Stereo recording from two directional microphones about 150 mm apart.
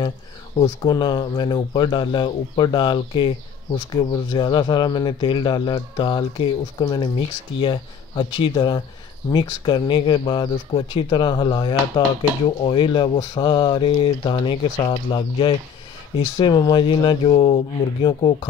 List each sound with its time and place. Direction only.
0.8 s speech: 30° left (ahead or behind)